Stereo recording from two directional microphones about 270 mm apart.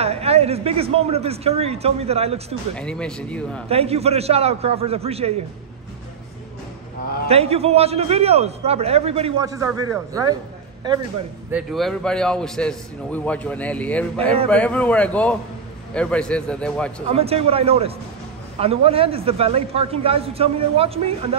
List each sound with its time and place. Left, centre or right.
0.0 s a man's voice: right
2.7 s a man's voice: centre
3.6 s a man's voice: right
7.2 s a man's voice: right
11.5 s a man's voice: centre
17.1 s a man's voice: right